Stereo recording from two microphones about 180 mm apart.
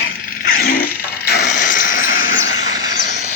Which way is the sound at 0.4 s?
50° left (ahead or behind).